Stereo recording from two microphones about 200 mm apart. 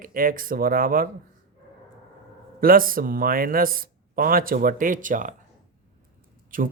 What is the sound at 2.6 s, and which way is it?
Speech, 45° right (ahead or behind).